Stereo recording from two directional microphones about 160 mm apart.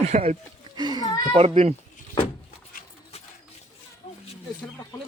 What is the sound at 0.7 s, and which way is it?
Speech, 25° right (ahead or behind).